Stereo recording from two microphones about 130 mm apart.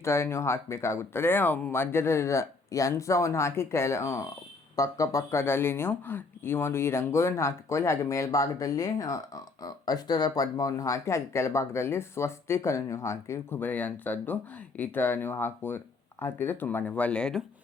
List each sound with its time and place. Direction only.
0.0 s speech: 20° left (ahead or behind)